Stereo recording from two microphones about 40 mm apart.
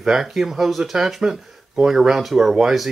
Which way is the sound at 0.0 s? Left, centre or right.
Centre.